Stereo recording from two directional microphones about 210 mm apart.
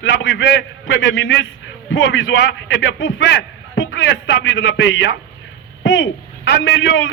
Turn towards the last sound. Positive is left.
turn(degrees=65)  # may be behind; listen again after turning